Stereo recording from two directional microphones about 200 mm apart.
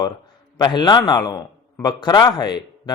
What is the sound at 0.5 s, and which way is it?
A man's voice, 20° left (ahead or behind).